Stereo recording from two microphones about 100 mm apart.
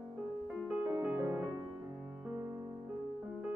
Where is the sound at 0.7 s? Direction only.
15° right (ahead or behind).